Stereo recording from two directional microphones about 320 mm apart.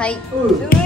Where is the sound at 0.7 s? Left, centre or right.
Left.